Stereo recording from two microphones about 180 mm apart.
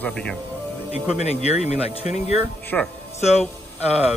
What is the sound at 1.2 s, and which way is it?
Speech, 35° left (ahead or behind).